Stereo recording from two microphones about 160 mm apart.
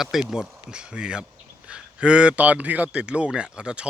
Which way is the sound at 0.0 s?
Centre (ahead or behind).